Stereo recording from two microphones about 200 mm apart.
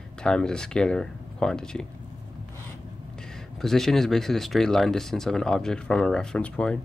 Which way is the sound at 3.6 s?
Centre (ahead or behind).